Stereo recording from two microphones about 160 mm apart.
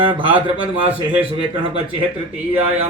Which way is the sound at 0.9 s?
35° right (ahead or behind).